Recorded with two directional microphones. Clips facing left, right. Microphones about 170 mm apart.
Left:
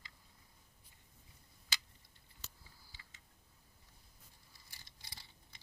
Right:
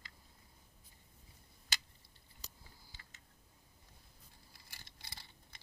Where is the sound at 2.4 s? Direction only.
45° right (ahead or behind).